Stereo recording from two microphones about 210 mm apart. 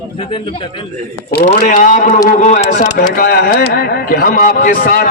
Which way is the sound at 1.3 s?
45° left (ahead or behind).